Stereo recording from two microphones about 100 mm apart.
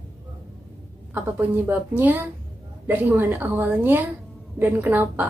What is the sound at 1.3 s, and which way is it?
A woman's voice, 20° right (ahead or behind).